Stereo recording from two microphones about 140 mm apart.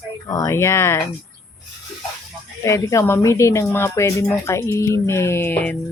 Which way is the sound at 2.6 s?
20° left (ahead or behind).